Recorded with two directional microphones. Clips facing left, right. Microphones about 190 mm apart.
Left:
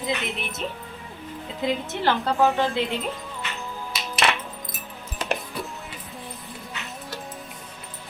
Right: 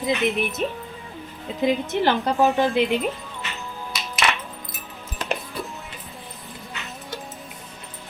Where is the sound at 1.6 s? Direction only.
15° right (ahead or behind).